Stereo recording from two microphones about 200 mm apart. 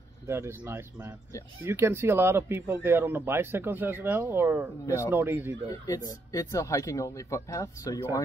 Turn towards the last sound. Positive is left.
turn(degrees=15)  # may be behind; listen again after turning